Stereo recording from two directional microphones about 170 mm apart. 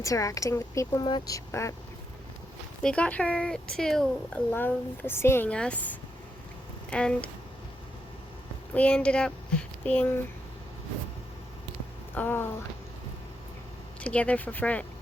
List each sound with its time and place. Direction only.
0.0 s speech: 20° left (ahead or behind)
2.8 s a woman's voice: 5° left (ahead or behind)
8.7 s speech: 5° left (ahead or behind)
12.1 s a woman's voice: 10° left (ahead or behind)
14.0 s a woman's voice: 5° left (ahead or behind)